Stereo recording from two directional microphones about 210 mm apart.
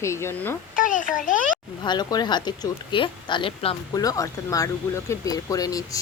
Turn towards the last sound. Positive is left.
turn(degrees=15)  # may be behind; listen again after turning